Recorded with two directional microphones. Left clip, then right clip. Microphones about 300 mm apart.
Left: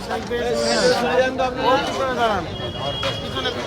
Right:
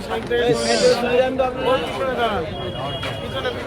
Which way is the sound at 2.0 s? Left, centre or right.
Left.